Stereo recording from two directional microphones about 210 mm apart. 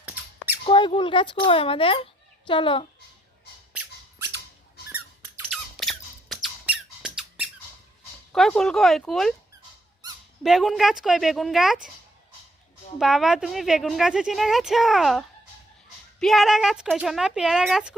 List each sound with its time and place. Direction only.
0.0 s squeak: 10° right (ahead or behind)
0.6 s speech: 25° left (ahead or behind)
5.5 s squeak: centre (ahead or behind)
8.3 s speech: 5° left (ahead or behind)
10.4 s speech: centre (ahead or behind)
13.0 s speech: centre (ahead or behind)
16.2 s speech: centre (ahead or behind)